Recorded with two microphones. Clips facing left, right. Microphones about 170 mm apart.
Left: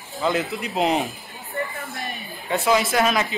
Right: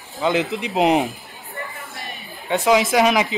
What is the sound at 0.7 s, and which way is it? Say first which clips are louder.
Speech: right 4 dB; 15° right (ahead or behind).